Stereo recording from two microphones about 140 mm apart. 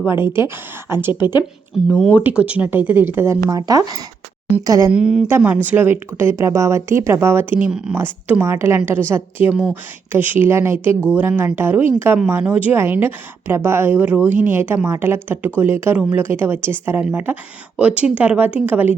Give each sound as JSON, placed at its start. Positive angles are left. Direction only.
{"t": 0.0, "sound": "a woman's voice", "side_deg": -15}
{"t": 2.1, "sound": "a woman's voice", "side_deg": -10}
{"t": 3.5, "sound": "speech", "side_deg": -25}
{"t": 4.9, "sound": "a woman's voice", "side_deg": -5}